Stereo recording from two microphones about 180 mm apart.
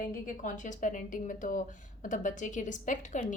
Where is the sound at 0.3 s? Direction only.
45° left (ahead or behind).